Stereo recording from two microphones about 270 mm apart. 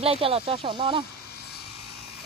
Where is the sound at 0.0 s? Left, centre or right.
Right.